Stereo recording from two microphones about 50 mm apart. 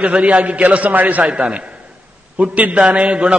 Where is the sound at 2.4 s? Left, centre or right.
Right.